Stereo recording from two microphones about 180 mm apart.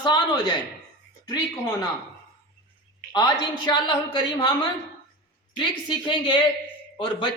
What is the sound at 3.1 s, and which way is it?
Speech, 25° left (ahead or behind).